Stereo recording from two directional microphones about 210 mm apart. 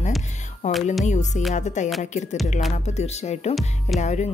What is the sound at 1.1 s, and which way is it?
Speech, 35° left (ahead or behind).